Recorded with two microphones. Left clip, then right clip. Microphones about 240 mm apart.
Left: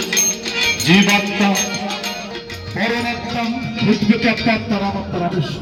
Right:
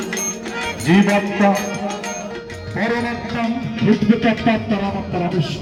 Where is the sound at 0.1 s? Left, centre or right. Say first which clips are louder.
Left 6 dB; left.